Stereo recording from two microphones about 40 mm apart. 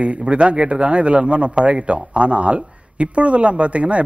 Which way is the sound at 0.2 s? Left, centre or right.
Right.